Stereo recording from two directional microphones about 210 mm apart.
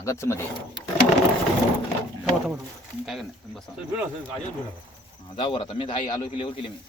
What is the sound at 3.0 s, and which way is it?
Speech, centre (ahead or behind).